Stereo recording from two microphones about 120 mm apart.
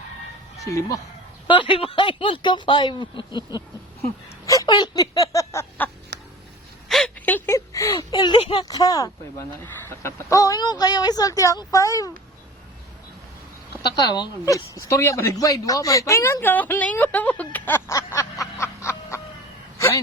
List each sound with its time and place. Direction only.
0.7 s speech: 25° left (ahead or behind)
1.5 s speech: 45° left (ahead or behind)
4.4 s a sound: 30° left (ahead or behind)
4.7 s speech: 35° left (ahead or behind)
6.8 s a sound: centre (ahead or behind)
7.3 s a sound: 20° left (ahead or behind)
8.1 s speech: 40° left (ahead or behind)
8.6 s speech: 30° left (ahead or behind)
13.9 s a woman's voice: 35° left (ahead or behind)